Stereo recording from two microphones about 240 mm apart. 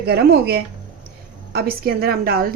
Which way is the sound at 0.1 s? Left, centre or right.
Right.